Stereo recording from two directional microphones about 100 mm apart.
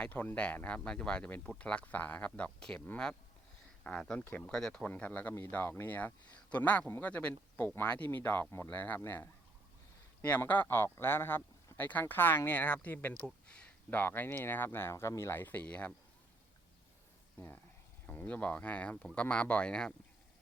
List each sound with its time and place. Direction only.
0.0 s speech: 20° left (ahead or behind)
4.2 s speech: 20° left (ahead or behind)
4.4 s speech: 10° left (ahead or behind)
18.0 s speech: 15° left (ahead or behind)